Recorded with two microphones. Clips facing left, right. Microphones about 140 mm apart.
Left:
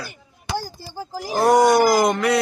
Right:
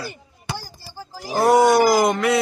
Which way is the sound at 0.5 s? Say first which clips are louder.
Left 7 dB; 50° left (ahead or behind).